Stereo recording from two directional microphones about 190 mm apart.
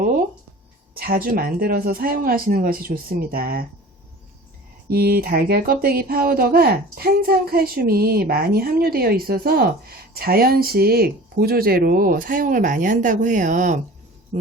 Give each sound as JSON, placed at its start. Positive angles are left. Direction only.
{"t": 0.9, "sound": "speech", "side_deg": -50}
{"t": 4.9, "sound": "speech", "side_deg": -55}